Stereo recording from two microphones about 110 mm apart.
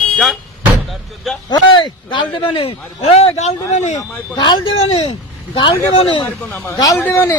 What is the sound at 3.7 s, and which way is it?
Speech, 90° left.